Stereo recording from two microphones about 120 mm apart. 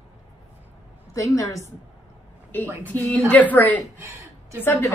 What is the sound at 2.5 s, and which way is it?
A woman's voice, 15° left (ahead or behind).